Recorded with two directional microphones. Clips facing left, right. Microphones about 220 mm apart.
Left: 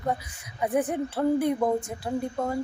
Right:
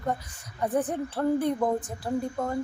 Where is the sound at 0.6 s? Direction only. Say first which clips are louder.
Left 1 dB; 10° left (ahead or behind).